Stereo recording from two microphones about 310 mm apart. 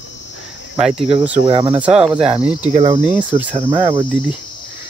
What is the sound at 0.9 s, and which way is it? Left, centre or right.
Cricket, centre.